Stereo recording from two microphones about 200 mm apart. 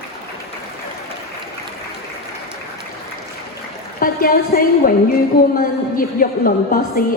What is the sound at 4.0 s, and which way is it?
A woman's voice, 45° left (ahead or behind).